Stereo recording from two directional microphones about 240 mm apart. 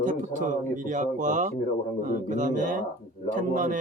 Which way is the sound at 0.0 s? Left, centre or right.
Right.